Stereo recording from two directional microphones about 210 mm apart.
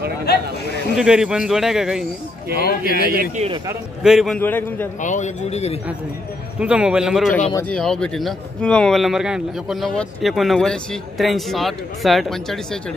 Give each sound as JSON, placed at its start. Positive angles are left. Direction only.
{"t": 0.3, "sound": "speech", "side_deg": 50}
{"t": 0.9, "sound": "speech", "side_deg": -5}
{"t": 2.8, "sound": "a man's voice", "side_deg": -45}
{"t": 3.3, "sound": "a man's voice", "side_deg": -25}
{"t": 4.0, "sound": "a man's voice", "side_deg": 0}
{"t": 5.0, "sound": "a man's voice", "side_deg": 35}
{"t": 6.6, "sound": "speech", "side_deg": -5}